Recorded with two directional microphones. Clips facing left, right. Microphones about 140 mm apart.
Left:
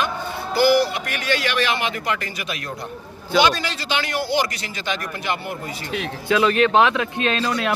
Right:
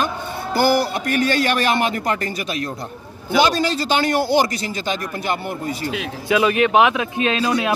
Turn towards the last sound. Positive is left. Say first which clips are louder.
# right 3 dB
turn(degrees=-15)  # may be behind; listen again after turning